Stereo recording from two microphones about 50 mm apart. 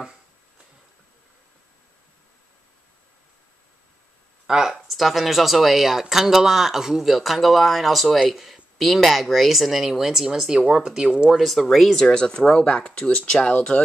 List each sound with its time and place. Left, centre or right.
4.5 s speech: centre
11.3 s speech: centre
12.1 s speech: centre